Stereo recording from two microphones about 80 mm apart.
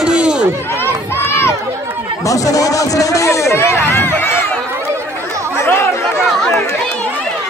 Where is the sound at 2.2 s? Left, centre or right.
Left.